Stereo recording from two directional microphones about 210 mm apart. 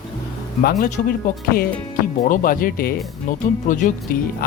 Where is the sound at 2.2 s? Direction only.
40° left (ahead or behind).